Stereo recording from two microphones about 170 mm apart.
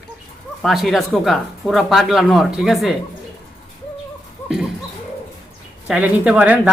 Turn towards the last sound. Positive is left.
turn(degrees=-5)  # may be behind; listen again after turning